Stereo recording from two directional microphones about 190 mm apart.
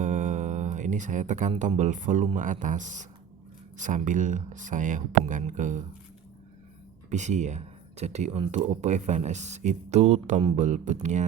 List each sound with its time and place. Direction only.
0.0 s speech: 40° right (ahead or behind)
7.1 s speech: 40° right (ahead or behind)